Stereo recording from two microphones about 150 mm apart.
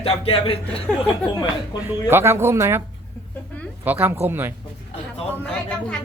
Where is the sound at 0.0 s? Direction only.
40° left (ahead or behind).